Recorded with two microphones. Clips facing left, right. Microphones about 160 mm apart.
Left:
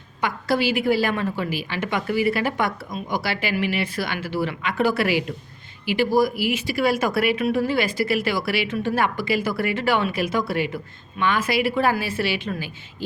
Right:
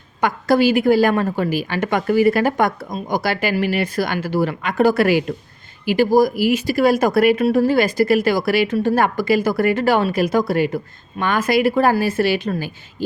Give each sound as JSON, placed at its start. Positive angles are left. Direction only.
{"t": 0.2, "sound": "a woman's voice", "side_deg": -45}